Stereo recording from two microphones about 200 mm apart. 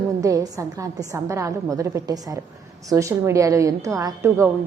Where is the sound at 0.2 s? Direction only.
15° right (ahead or behind).